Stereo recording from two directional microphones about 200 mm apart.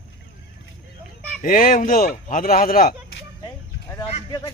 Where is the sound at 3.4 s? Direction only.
15° left (ahead or behind).